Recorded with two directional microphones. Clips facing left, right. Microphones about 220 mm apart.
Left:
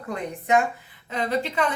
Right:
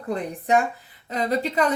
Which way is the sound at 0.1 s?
35° right (ahead or behind).